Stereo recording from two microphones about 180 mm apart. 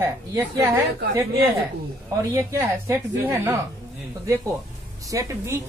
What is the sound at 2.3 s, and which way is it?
A woman's voice, 15° right (ahead or behind).